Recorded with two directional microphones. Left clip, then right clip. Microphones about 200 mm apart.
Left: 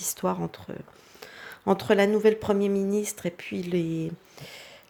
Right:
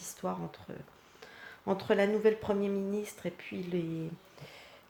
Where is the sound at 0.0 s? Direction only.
50° left (ahead or behind).